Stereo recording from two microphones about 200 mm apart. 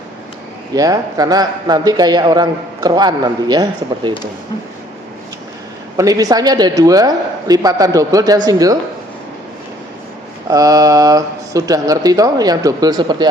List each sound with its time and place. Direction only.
0.8 s a man's voice: 15° right (ahead or behind)
6.0 s a man's voice: 20° right (ahead or behind)
10.5 s speech: 15° right (ahead or behind)